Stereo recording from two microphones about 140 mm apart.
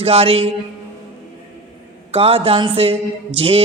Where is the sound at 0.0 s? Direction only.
45° right (ahead or behind).